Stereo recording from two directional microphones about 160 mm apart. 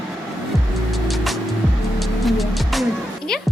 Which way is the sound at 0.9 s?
Centre (ahead or behind).